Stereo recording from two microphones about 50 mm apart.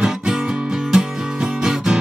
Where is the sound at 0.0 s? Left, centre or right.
Centre.